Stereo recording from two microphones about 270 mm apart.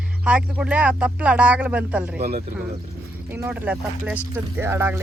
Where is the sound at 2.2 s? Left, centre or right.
Right.